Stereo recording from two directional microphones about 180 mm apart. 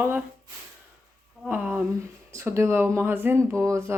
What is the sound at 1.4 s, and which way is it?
Speech, 10° right (ahead or behind).